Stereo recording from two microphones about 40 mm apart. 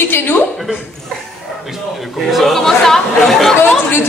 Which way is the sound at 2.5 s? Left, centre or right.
Centre.